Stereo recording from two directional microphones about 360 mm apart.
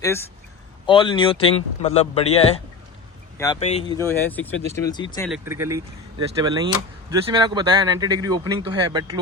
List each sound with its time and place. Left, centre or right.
0.9 s speech: centre
5.3 s speech: centre